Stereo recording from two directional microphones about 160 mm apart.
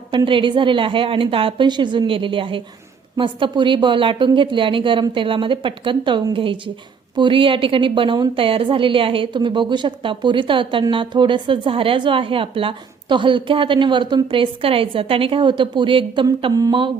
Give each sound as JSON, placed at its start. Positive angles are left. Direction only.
{"t": 0.1, "sound": "a woman's voice", "side_deg": -30}